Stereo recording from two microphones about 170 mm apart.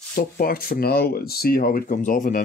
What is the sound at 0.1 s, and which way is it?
Speech, 60° left (ahead or behind).